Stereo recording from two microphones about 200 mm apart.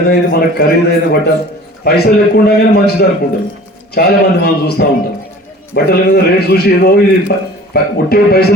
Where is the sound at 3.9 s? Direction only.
50° left (ahead or behind).